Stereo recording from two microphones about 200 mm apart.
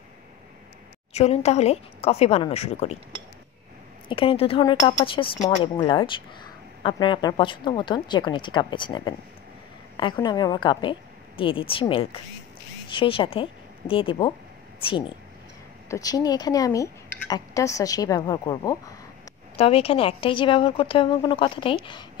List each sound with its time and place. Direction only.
1.1 s speech: 30° left (ahead or behind)
4.1 s a woman's voice: 25° left (ahead or behind)
10.2 s a woman's voice: 20° left (ahead or behind)
19.5 s a woman's voice: 30° left (ahead or behind)